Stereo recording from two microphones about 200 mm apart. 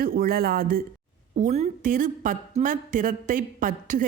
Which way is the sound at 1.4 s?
35° right (ahead or behind).